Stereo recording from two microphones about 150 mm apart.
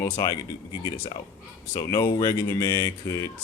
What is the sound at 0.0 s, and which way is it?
Speech, 20° left (ahead or behind).